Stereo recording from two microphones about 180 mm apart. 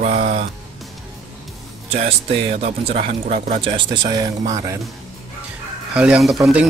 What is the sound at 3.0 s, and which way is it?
Speech, 45° right (ahead or behind).